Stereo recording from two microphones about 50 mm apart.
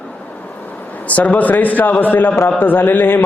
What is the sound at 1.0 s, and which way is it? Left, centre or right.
A man's voice, left.